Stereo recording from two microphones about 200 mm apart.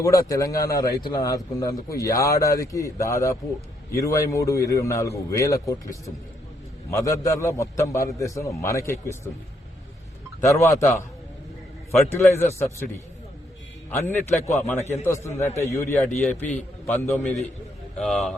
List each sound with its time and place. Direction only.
0.0 s speech: 15° left (ahead or behind)
10.4 s speech: 15° left (ahead or behind)
12.1 s speech: 10° left (ahead or behind)
14.0 s speech: 10° left (ahead or behind)